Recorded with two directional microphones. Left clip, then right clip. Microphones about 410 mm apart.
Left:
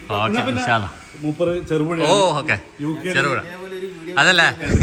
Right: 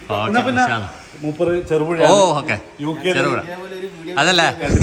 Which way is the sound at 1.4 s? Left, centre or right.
Right.